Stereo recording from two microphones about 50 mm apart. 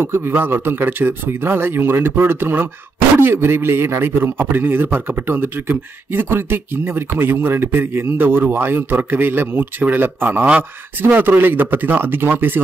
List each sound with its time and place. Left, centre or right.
0.0 s a man's voice: right